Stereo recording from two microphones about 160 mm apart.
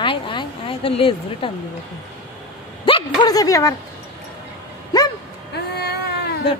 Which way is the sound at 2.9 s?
35° left (ahead or behind).